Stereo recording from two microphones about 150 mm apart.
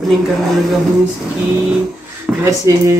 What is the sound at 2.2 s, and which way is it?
Speech, 20° right (ahead or behind).